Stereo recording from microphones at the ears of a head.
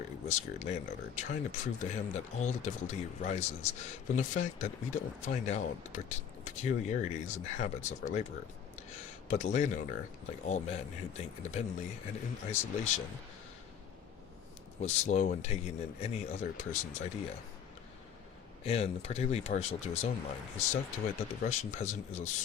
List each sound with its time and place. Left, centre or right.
0.0 s speech: left
14.8 s speech: left
18.6 s speech: left